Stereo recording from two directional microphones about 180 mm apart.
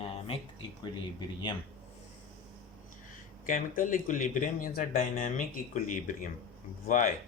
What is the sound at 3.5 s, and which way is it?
Speech, 50° left (ahead or behind).